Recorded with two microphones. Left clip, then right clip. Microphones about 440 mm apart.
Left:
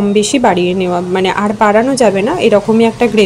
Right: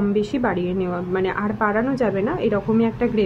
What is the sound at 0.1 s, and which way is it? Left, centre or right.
Speech, right.